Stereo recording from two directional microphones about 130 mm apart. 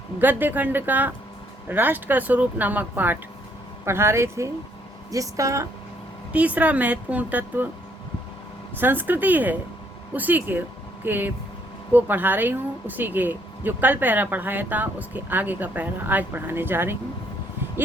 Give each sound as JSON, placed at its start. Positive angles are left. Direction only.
{"t": 0.2, "sound": "speech", "side_deg": -15}
{"t": 6.3, "sound": "speech", "side_deg": -10}
{"t": 8.8, "sound": "speech", "side_deg": -15}